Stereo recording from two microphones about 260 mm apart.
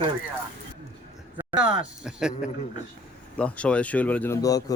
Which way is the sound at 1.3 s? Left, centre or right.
Centre.